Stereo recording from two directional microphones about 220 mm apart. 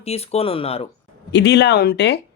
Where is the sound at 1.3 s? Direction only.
50° left (ahead or behind).